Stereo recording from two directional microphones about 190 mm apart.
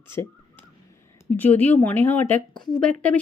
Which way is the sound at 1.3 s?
10° left (ahead or behind).